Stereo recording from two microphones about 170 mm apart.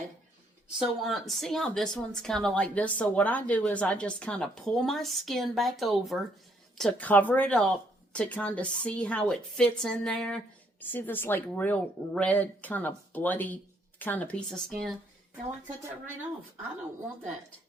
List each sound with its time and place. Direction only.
0.8 s a woman's voice: centre (ahead or behind)